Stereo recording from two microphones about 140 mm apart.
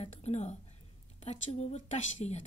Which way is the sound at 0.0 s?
55° left (ahead or behind).